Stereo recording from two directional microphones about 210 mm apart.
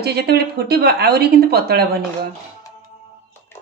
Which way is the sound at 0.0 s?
50° right (ahead or behind).